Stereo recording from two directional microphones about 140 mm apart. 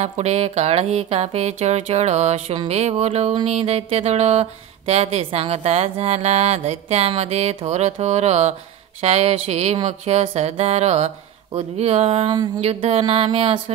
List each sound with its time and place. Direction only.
0.0 s speech: 50° right (ahead or behind)